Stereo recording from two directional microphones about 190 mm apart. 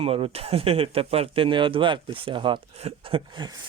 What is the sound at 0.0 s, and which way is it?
Speech, 30° right (ahead or behind).